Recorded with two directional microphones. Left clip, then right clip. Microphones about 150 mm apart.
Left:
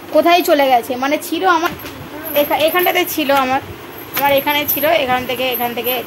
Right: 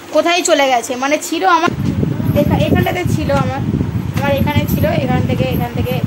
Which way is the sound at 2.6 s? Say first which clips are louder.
Left 3 dB; 45° left (ahead or behind).